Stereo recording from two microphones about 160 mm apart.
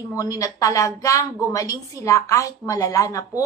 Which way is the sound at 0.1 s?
20° left (ahead or behind).